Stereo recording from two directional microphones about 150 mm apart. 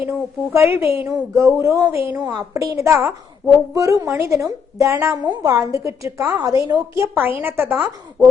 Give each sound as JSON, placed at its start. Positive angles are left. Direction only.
{"t": 0.1, "sound": "a woman's voice", "side_deg": -15}